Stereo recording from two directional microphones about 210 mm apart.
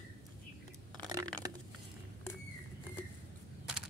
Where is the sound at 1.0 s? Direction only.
15° right (ahead or behind).